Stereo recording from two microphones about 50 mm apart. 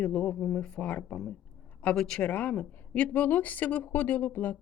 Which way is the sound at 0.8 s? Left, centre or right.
Left.